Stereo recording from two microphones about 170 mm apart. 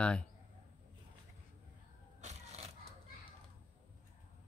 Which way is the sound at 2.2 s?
40° right (ahead or behind).